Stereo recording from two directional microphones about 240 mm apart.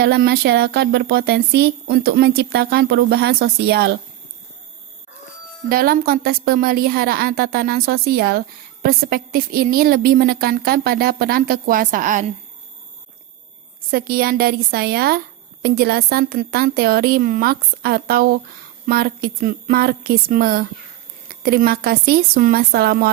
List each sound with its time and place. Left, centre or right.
0.0 s speech: right
5.6 s a woman's voice: right
13.9 s a woman's voice: right